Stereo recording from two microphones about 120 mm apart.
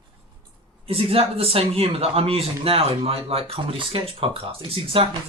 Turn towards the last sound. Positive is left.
turn(degrees=-50)  # may be behind; listen again after turning